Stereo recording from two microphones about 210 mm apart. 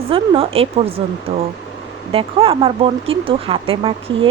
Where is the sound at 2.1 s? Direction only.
25° right (ahead or behind).